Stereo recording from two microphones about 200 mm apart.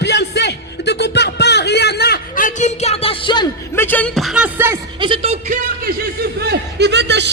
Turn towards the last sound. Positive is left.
turn(degrees=-60)  # may be behind; listen again after turning